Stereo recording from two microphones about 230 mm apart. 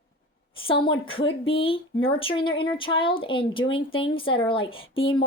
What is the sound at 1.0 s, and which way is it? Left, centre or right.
A woman's voice, left.